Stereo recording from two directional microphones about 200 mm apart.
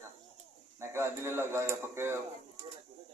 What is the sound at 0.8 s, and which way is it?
Speech, 15° right (ahead or behind).